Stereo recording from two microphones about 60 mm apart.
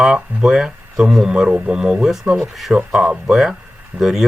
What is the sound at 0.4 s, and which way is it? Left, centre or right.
Speech, centre.